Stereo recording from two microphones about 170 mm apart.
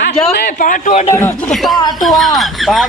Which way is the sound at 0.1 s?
35° left (ahead or behind).